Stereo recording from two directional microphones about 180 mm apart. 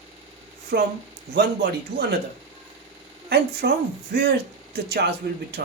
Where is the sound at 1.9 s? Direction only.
65° right (ahead or behind).